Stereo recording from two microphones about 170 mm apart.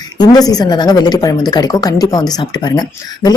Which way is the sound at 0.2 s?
20° left (ahead or behind).